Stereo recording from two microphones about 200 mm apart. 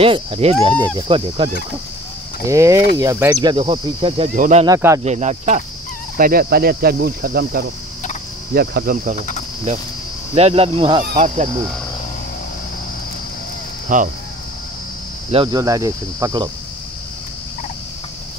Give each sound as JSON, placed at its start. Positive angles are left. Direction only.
{"t": 0.0, "sound": "speech", "side_deg": -30}
{"t": 2.4, "sound": "speech", "side_deg": -15}
{"t": 4.4, "sound": "speech", "side_deg": -35}
{"t": 4.6, "sound": "speech", "side_deg": -15}
{"t": 5.0, "sound": "speech", "side_deg": -35}
{"t": 6.1, "sound": "speech", "side_deg": -45}
{"t": 10.3, "sound": "speech", "side_deg": -30}
{"t": 13.9, "sound": "speech", "side_deg": -40}
{"t": 15.3, "sound": "speech", "side_deg": -20}